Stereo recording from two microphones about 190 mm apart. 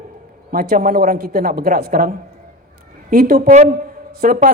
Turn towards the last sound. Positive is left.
turn(degrees=-50)  # may be behind; listen again after turning